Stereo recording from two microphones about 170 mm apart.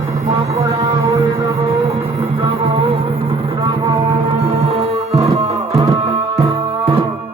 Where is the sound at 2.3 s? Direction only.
35° right (ahead or behind).